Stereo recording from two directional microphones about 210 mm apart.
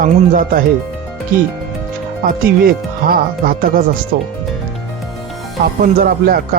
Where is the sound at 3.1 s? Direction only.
45° right (ahead or behind).